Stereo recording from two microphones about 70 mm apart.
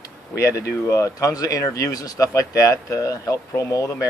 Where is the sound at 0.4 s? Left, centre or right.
Left.